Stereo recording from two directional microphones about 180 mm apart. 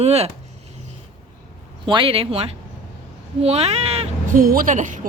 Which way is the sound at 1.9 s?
30° right (ahead or behind).